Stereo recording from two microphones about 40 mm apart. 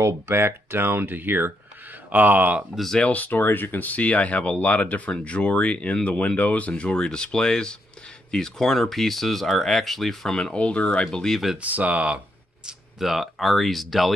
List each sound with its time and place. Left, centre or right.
0.3 s speech: right
2.0 s speech: right
3.1 s speech: left; by 10.3 s centre
10.3 s speech: centre
10.6 s speech: left
11.1 s speech: centre
11.5 s speech: right
13.0 s speech: centre